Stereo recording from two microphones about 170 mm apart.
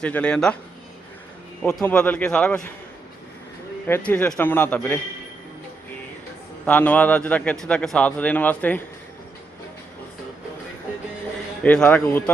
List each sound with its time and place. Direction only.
0.0 s speech: 5° left (ahead or behind)
1.6 s a man's voice: 10° left (ahead or behind)
3.8 s a man's voice: 10° left (ahead or behind)
6.7 s a man's voice: 10° left (ahead or behind)
11.6 s a man's voice: 5° left (ahead or behind)